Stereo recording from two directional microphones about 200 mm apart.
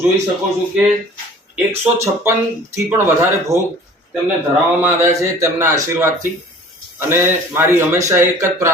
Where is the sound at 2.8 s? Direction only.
10° right (ahead or behind).